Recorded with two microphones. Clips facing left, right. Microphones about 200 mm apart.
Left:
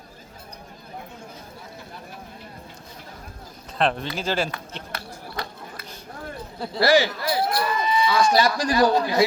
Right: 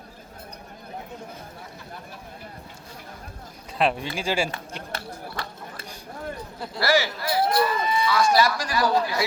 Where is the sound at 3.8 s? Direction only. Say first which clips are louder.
Even; 10° right (ahead or behind).